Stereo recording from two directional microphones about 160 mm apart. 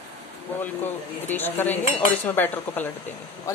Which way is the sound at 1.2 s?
10° left (ahead or behind).